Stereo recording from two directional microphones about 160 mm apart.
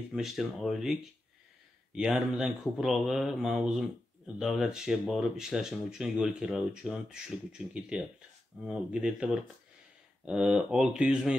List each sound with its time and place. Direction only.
0.1 s speech: centre (ahead or behind)